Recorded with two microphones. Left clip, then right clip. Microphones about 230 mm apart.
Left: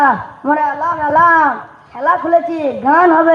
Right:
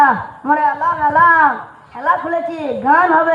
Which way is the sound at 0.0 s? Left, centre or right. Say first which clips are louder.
Even; left.